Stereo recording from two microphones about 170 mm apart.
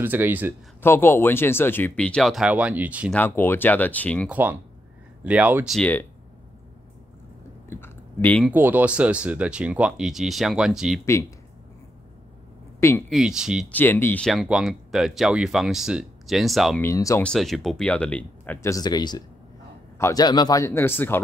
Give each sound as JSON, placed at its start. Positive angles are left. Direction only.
{"t": 0.0, "sound": "speech", "side_deg": -10}
{"t": 0.8, "sound": "speech", "side_deg": 15}
{"t": 3.1, "sound": "speech", "side_deg": 10}
{"t": 4.3, "sound": "speech", "side_deg": -10}
{"t": 5.8, "sound": "speech", "side_deg": 10}
{"t": 7.7, "sound": "chewing", "side_deg": 10}
{"t": 8.5, "sound": "speech", "side_deg": -10}
{"t": 11.1, "sound": "speech", "side_deg": 15}
{"t": 13.1, "sound": "speech", "side_deg": -5}
{"t": 13.7, "sound": "speech", "side_deg": 10}
{"t": 16.8, "sound": "speech", "side_deg": 20}
{"t": 17.2, "sound": "speech", "side_deg": 5}